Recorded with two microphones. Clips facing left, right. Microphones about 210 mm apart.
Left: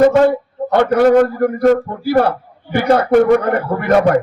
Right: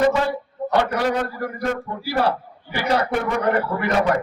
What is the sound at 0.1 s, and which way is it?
A man's voice, 55° left (ahead or behind).